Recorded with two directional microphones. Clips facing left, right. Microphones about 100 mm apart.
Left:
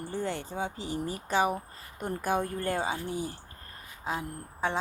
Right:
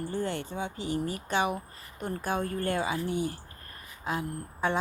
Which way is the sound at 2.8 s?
30° left (ahead or behind).